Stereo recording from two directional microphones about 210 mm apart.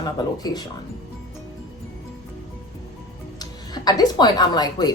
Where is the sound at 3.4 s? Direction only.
20° left (ahead or behind).